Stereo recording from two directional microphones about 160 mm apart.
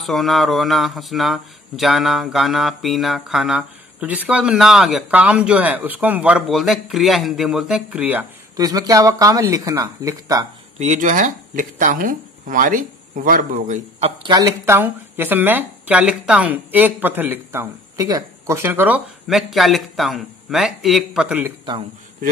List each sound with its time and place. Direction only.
0.0 s speech: centre (ahead or behind)
8.5 s speech: 20° right (ahead or behind)
10.8 s speech: 50° right (ahead or behind)
14.2 s speech: 25° right (ahead or behind); by 21.5 s 10° right (ahead or behind)